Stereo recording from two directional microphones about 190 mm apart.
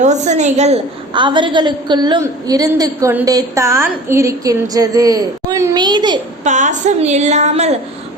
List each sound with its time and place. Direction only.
0.0 s a woman's voice: 40° right (ahead or behind); by 6.1 s 25° right (ahead or behind)
6.4 s a woman's voice: 40° right (ahead or behind)